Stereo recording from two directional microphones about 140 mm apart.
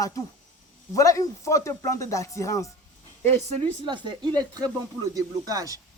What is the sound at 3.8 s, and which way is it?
Speech, 35° right (ahead or behind).